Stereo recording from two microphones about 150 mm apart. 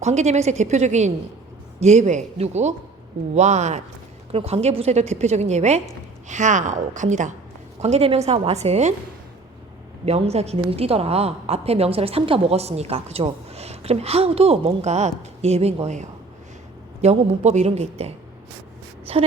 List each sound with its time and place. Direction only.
0.0 s a woman's voice: 50° right (ahead or behind)
7.8 s a woman's voice: 45° right (ahead or behind)
10.1 s a woman's voice: 45° right (ahead or behind)